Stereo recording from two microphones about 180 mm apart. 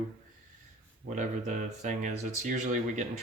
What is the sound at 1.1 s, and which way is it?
Speech, 45° right (ahead or behind).